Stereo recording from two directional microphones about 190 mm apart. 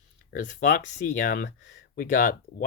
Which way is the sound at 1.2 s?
50° left (ahead or behind).